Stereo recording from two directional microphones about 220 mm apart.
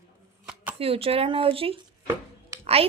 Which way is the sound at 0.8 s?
25° right (ahead or behind).